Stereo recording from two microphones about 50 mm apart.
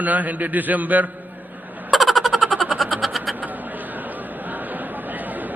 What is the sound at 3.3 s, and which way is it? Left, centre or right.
Chatter, right.